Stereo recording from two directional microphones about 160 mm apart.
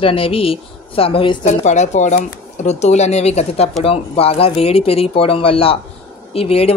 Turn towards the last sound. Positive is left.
turn(degrees=35)  # may be behind; listen again after turning